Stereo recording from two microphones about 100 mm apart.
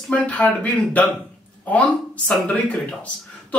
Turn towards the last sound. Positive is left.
turn(degrees=15)  # may be behind; listen again after turning